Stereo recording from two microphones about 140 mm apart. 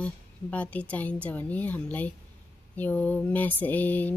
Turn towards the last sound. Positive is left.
turn(degrees=10)  # may be behind; listen again after turning